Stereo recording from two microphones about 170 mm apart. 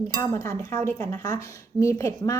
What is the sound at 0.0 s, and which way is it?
Speech, 15° left (ahead or behind).